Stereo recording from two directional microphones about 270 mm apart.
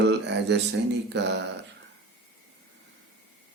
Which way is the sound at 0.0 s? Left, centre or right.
Right.